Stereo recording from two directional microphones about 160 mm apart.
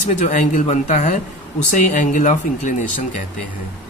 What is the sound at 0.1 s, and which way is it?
Speech, 50° left (ahead or behind).